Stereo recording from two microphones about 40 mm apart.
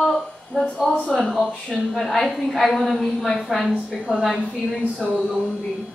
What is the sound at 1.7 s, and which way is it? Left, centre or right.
A woman's voice, centre.